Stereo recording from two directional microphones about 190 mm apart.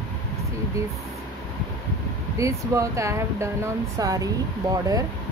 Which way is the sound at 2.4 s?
15° right (ahead or behind).